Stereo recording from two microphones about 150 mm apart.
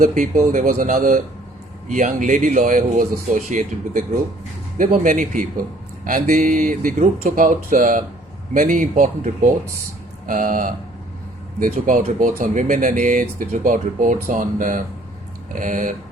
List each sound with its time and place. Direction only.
0.0 s speech: 60° right (ahead or behind)